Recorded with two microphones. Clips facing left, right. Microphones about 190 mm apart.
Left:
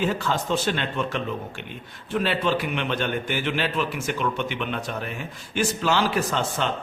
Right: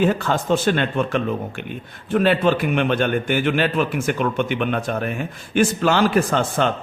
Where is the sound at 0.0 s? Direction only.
55° right (ahead or behind).